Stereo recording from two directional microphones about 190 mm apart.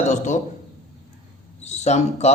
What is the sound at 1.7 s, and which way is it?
Speech, 35° left (ahead or behind).